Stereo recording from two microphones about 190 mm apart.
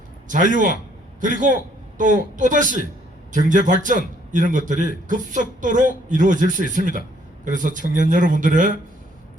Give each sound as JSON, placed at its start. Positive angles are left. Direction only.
{"t": 0.3, "sound": "speech", "side_deg": -45}